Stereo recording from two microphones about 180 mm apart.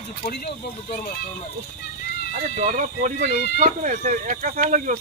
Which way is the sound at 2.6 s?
45° right (ahead or behind).